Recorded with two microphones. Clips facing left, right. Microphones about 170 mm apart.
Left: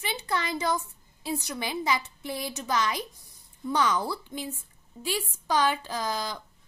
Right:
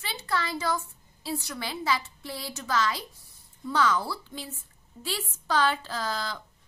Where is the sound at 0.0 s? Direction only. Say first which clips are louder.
Left 1 dB; 20° left (ahead or behind).